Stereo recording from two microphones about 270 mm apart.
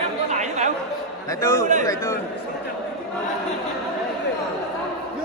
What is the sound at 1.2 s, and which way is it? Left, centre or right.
Speech, centre.